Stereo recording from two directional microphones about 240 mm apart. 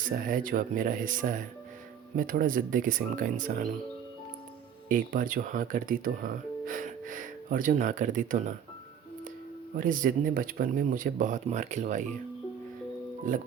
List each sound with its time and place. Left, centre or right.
0.0 s speech: right
4.9 s speech: right
9.7 s speech: right
13.3 s speech: right